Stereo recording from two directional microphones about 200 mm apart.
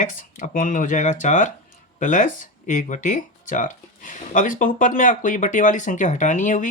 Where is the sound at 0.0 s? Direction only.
40° left (ahead or behind).